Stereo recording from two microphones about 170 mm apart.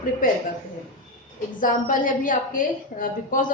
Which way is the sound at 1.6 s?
55° left (ahead or behind).